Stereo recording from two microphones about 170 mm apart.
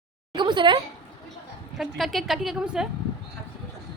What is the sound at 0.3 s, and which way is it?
Speech, 25° right (ahead or behind).